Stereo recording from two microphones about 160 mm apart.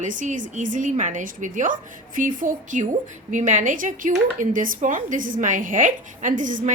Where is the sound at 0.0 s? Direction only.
50° right (ahead or behind).